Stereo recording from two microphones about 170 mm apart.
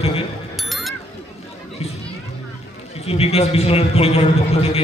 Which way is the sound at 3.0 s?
35° left (ahead or behind).